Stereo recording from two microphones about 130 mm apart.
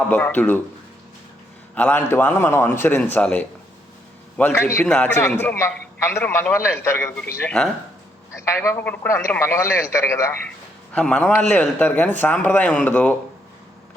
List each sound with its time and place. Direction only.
0.1 s speech: 15° left (ahead or behind)
1.7 s a man's voice: 15° left (ahead or behind)
10.9 s speech: 10° left (ahead or behind)